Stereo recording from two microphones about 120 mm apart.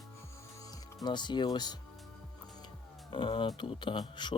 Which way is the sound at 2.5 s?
40° left (ahead or behind).